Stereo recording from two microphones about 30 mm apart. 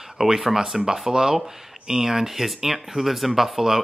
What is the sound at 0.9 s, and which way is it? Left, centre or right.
Speech, centre.